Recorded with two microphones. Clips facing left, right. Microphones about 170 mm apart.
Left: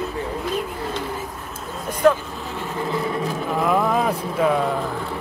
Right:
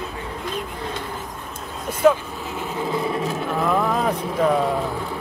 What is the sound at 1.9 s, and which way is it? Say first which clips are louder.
Speech: even; 5° right (ahead or behind).